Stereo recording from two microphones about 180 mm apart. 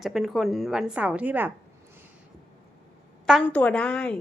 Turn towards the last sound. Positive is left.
turn(degrees=5)  # may be behind; listen again after turning